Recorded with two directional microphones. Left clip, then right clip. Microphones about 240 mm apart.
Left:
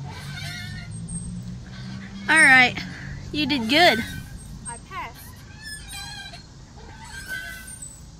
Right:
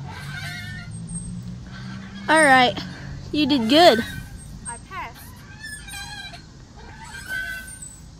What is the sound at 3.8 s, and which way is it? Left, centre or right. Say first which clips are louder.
Speech: right 3 dB; left.